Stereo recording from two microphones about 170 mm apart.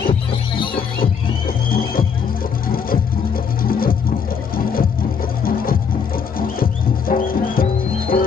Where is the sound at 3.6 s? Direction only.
60° left (ahead or behind).